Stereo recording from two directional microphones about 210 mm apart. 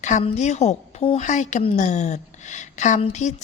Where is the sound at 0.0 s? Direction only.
35° left (ahead or behind).